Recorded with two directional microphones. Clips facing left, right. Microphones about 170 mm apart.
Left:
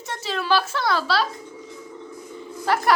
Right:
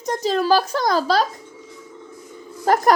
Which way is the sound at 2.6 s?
45° right (ahead or behind).